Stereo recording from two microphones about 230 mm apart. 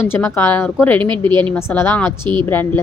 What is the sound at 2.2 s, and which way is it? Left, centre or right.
Speech, centre.